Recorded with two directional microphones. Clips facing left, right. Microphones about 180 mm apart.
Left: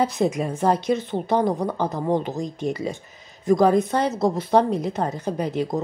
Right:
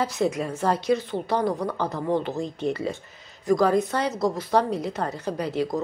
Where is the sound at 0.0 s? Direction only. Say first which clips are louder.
Left 3 dB; 20° left (ahead or behind).